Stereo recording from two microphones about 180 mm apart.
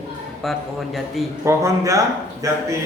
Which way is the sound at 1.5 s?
15° right (ahead or behind).